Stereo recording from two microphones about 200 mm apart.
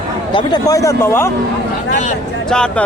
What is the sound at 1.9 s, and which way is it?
Speech, 40° left (ahead or behind).